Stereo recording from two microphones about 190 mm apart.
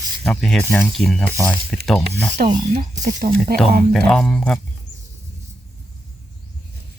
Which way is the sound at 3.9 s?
5° left (ahead or behind).